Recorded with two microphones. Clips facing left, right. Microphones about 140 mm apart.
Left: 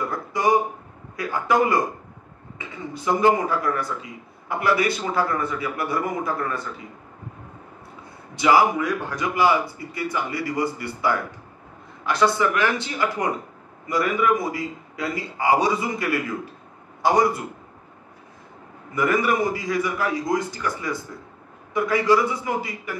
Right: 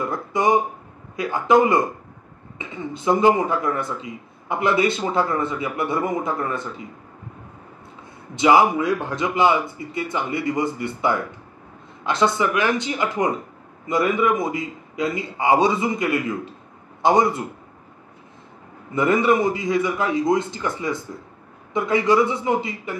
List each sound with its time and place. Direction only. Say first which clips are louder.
0.1 s a sound: right 1 dB; 20° right (ahead or behind)
1.1 s speech: right 4 dB; 20° right (ahead or behind)
8.4 s speech: right 2 dB; 20° right (ahead or behind)
18.9 s speech: right 3 dB; 25° right (ahead or behind)